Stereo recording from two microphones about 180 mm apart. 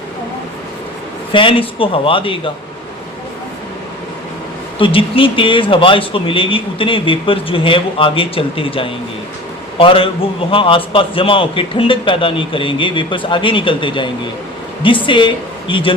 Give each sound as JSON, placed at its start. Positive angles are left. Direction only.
{"t": 1.3, "sound": "speech", "side_deg": 30}
{"t": 4.8, "sound": "a man's voice", "side_deg": 30}